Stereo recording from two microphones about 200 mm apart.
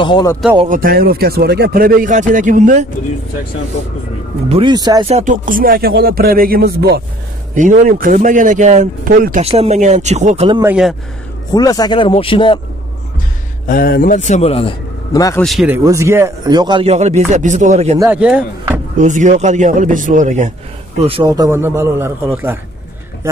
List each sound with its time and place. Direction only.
0.0 s speech: 20° left (ahead or behind)
0.7 s speech: 45° right (ahead or behind)
4.5 s speech: 25° right (ahead or behind)
5.0 s speech: 35° right (ahead or behind)
7.5 s speech: 40° right (ahead or behind)
9.4 s speech: 30° right (ahead or behind)
10.6 s speech: 5° right (ahead or behind)
11.5 s speech: 20° left (ahead or behind)
13.7 s a man's voice: 45° left (ahead or behind); by 15.4 s 15° left (ahead or behind)
15.4 s speech: 5° right (ahead or behind)
15.8 s speech: 15° right (ahead or behind); by 17.9 s 35° right (ahead or behind)
17.9 s a man's voice: 10° right (ahead or behind)
18.9 s speech: 40° right (ahead or behind)
21.4 s a man's voice: 15° right (ahead or behind)